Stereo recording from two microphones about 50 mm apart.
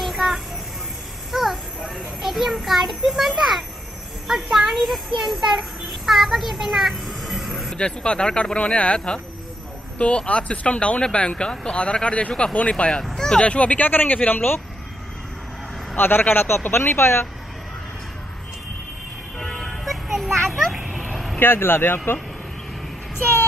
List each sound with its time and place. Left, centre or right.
0.0 s a sound: centre
4.3 s a child's voice: centre
7.7 s speech: centre
13.1 s speech: centre
13.4 s speech: left
16.0 s speech: left
19.3 s music: centre
20.7 s vehicle: centre
21.0 s vehicle: centre
21.4 s speech: left